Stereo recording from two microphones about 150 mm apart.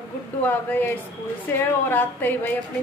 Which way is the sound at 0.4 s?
10° left (ahead or behind).